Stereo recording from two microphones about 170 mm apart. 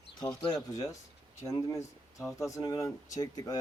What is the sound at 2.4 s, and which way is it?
Speech, 20° left (ahead or behind).